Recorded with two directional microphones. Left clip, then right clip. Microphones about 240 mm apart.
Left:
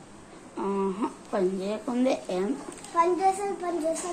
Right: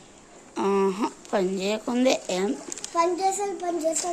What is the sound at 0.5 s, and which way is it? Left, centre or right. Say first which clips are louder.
A woman's voice: right 5 dB; right.